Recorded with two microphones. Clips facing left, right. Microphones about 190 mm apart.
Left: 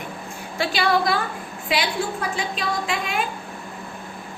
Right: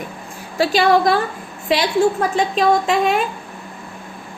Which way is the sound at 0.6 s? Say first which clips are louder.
Right 7 dB; 45° right (ahead or behind).